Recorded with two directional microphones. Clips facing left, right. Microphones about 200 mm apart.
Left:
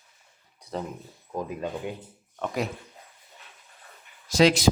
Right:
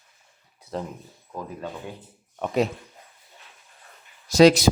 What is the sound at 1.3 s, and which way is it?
Speech, 15° left (ahead or behind).